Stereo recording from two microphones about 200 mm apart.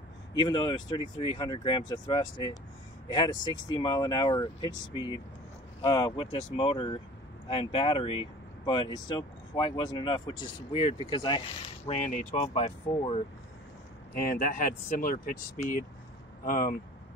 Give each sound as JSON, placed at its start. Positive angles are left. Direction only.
{"t": 0.3, "sound": "speech", "side_deg": 20}
{"t": 14.2, "sound": "speech", "side_deg": 45}